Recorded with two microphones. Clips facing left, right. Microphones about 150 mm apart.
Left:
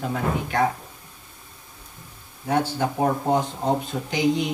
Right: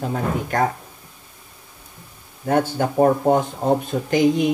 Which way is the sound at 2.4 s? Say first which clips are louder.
Right 3 dB; 50° right (ahead or behind).